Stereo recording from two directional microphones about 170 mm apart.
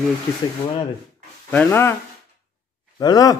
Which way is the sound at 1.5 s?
10° left (ahead or behind).